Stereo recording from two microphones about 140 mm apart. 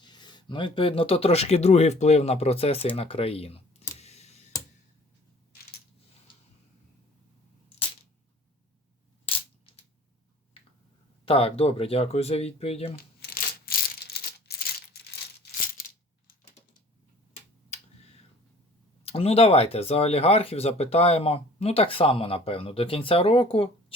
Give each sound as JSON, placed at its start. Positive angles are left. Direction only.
{"t": 0.0, "sound": "speech", "side_deg": 30}
{"t": 9.3, "sound": "coin", "side_deg": 40}
{"t": 11.3, "sound": "speech", "side_deg": 45}
{"t": 19.0, "sound": "speech", "side_deg": 45}